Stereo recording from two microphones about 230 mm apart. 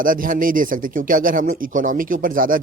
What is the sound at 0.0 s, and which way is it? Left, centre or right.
A man's voice, right.